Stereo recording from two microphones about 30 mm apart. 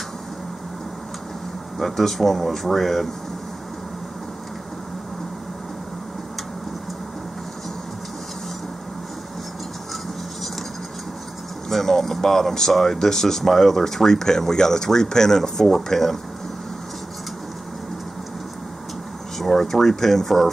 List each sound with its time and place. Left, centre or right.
1.8 s speech: centre
11.7 s a sound: centre
12.2 s speech: centre
19.3 s speech: centre